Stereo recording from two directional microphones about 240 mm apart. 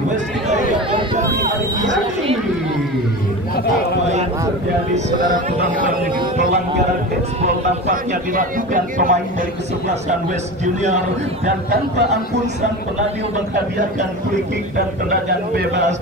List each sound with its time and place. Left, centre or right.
0.5 s chatter: right
7.9 s a man's voice: right
10.6 s a man's voice: right
15.0 s a man's voice: right